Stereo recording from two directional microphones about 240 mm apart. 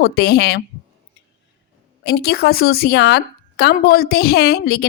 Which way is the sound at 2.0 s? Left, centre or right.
Left.